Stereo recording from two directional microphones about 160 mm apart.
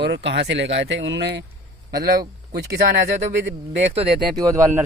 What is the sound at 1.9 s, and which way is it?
Speech, 75° right (ahead or behind).